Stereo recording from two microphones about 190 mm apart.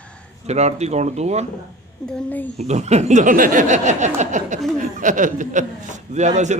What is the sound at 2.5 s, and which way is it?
A man's voice, 35° right (ahead or behind).